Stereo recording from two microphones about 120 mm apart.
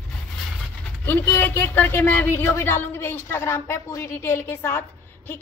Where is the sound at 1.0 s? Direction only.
15° left (ahead or behind).